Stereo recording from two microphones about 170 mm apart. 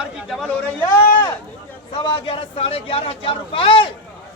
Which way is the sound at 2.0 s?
30° left (ahead or behind).